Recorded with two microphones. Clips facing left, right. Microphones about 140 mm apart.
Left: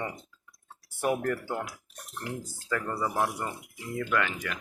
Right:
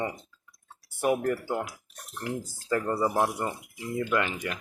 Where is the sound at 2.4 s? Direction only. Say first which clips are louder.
Right 5 dB; 30° right (ahead or behind).